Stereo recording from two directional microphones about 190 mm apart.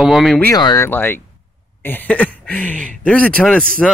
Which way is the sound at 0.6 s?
20° left (ahead or behind).